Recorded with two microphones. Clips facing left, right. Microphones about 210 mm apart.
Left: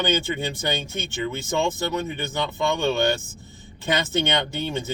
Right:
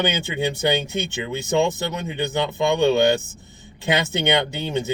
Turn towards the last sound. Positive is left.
turn(degrees=-15)  # may be behind; listen again after turning